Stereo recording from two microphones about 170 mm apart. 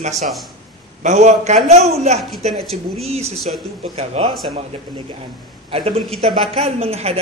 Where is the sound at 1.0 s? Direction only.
40° right (ahead or behind).